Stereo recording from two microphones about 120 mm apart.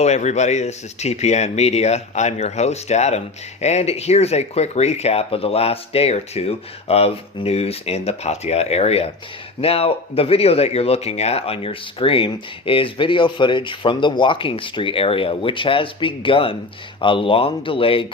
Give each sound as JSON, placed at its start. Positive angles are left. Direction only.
{"t": 0.0, "sound": "speech", "side_deg": 75}